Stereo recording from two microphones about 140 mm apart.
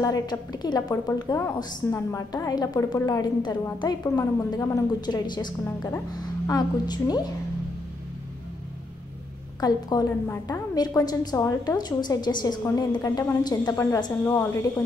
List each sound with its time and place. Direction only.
0.0 s a woman's voice: 30° left (ahead or behind)
9.6 s a woman's voice: 30° left (ahead or behind)
14.2 s a woman's voice: 15° left (ahead or behind)